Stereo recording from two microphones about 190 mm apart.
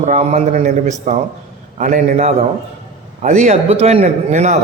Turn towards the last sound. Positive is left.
turn(degrees=-40)  # may be behind; listen again after turning